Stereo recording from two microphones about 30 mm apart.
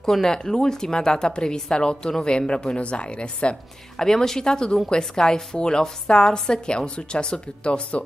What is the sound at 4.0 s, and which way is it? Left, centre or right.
Speech, centre.